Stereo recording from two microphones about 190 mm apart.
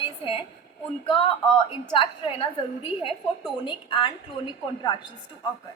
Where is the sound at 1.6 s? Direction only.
30° left (ahead or behind).